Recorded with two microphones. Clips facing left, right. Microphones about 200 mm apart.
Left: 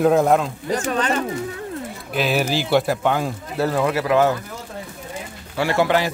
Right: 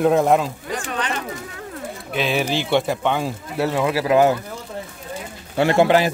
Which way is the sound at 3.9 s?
25° right (ahead or behind).